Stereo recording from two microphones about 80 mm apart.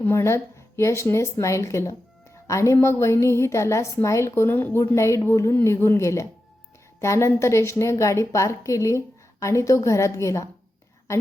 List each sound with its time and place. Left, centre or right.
0.0 s speech: left
4.9 s speech: left